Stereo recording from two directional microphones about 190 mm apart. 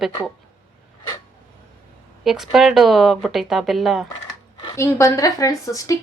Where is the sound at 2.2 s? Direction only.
Centre (ahead or behind).